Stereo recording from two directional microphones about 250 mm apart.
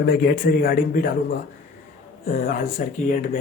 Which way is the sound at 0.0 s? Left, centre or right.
Left.